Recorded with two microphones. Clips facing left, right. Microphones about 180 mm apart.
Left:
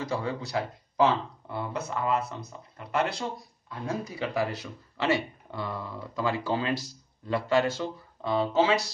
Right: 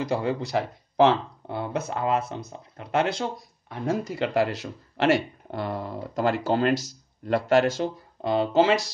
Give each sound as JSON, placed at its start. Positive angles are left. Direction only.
{"t": 0.1, "sound": "speech", "side_deg": -70}
{"t": 6.1, "sound": "speech", "side_deg": -70}
{"t": 7.8, "sound": "speech", "side_deg": -75}